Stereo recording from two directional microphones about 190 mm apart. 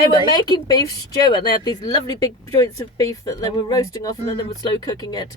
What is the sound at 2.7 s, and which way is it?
Speech, 20° left (ahead or behind).